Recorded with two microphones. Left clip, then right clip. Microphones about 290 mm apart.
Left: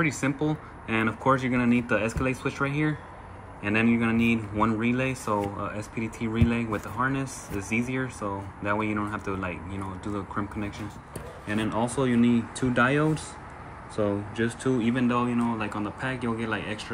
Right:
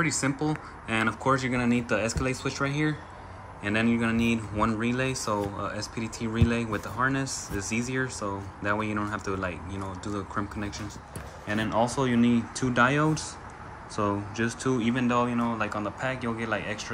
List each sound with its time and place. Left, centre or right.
0.8 s speech: centre